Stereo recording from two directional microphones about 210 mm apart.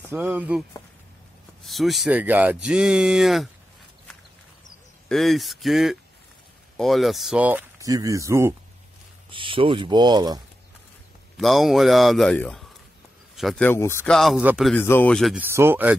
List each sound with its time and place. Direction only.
0.1 s speech: 5° right (ahead or behind)
5.0 s speech: centre (ahead or behind)
9.3 s speech: 25° right (ahead or behind)
11.3 s speech: centre (ahead or behind)
14.8 s speech: 10° left (ahead or behind); by 16.0 s 10° right (ahead or behind)